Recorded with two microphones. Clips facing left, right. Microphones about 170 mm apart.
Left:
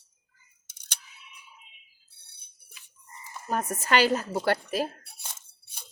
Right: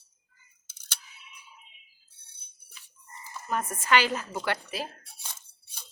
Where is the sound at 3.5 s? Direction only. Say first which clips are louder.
Even; 40° left (ahead or behind).